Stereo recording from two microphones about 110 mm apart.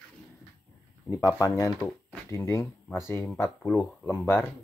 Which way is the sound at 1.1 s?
35° left (ahead or behind).